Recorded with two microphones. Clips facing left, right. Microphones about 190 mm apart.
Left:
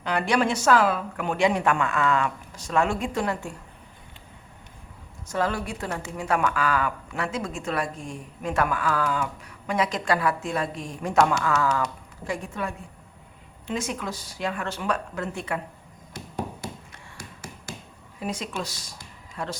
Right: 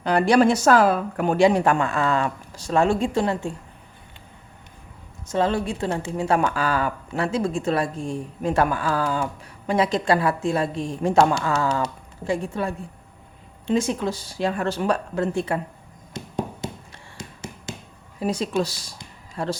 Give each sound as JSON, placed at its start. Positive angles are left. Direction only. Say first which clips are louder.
{"t": 0.0, "sound": "speech", "louder": "right 7 dB", "side_deg": -35}
{"t": 5.3, "sound": "speech", "louder": "right 5 dB", "side_deg": -25}
{"t": 16.1, "sound": "a sound", "louder": "right 4 dB", "side_deg": -20}
{"t": 18.2, "sound": "speech", "louder": "right 8 dB", "side_deg": -35}